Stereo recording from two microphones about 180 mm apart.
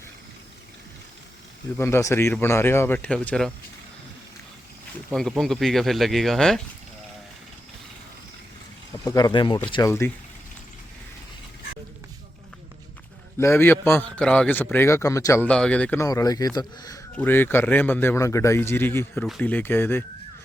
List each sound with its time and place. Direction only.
1.8 s a man's voice: 15° left (ahead or behind)
5.1 s speech: centre (ahead or behind)
9.0 s speech: 20° left (ahead or behind)
13.4 s a man's voice: 15° left (ahead or behind)